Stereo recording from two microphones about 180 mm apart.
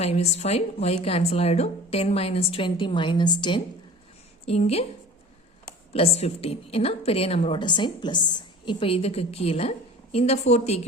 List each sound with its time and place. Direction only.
0.0 s a woman's voice: 35° left (ahead or behind)
5.9 s a woman's voice: 35° left (ahead or behind)